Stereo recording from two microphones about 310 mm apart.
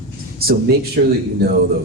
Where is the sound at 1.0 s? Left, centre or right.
Right.